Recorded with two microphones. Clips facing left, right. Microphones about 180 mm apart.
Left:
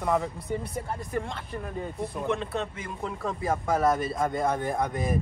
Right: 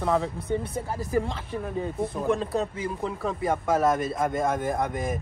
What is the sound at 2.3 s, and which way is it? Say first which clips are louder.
Speech: right 4 dB; 35° right (ahead or behind).